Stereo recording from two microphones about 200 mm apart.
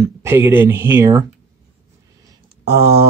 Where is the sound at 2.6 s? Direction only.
55° right (ahead or behind).